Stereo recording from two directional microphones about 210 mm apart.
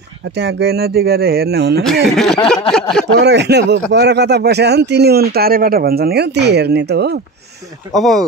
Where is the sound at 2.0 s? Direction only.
Centre (ahead or behind).